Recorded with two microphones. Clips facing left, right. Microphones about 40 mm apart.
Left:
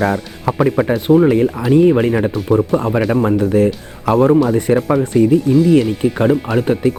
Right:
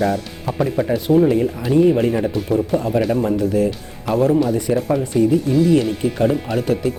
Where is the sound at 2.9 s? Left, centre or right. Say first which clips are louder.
Left 3 dB; left.